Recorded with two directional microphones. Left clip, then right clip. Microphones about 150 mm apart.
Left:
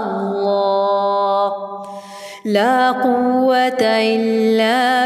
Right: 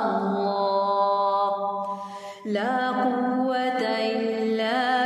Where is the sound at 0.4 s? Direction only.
35° left (ahead or behind).